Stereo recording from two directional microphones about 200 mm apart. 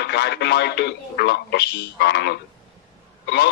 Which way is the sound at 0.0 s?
55° left (ahead or behind).